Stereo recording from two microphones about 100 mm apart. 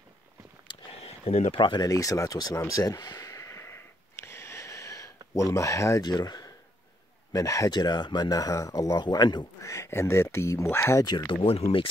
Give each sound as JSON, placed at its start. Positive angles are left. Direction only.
{"t": 0.9, "sound": "a sound", "side_deg": 90}
{"t": 1.6, "sound": "speech", "side_deg": 55}
{"t": 1.9, "sound": "speech", "side_deg": 35}
{"t": 3.3, "sound": "a sound", "side_deg": 30}
{"t": 6.0, "sound": "speech", "side_deg": 45}
{"t": 9.0, "sound": "speech", "side_deg": 45}
{"t": 9.6, "sound": "speech", "side_deg": 30}
{"t": 11.1, "sound": "speech", "side_deg": 45}
{"t": 11.4, "sound": "speech", "side_deg": 85}